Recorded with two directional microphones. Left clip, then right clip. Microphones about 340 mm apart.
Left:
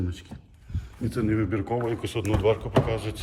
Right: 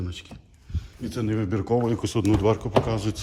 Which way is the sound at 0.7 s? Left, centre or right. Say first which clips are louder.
Left 2 dB; centre.